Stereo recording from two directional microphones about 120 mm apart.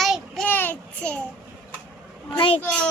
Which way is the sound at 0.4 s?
15° left (ahead or behind).